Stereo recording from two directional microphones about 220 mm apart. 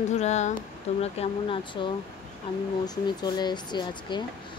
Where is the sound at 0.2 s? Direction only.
30° left (ahead or behind).